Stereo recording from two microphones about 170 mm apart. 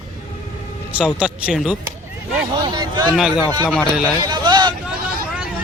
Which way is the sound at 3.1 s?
5° right (ahead or behind).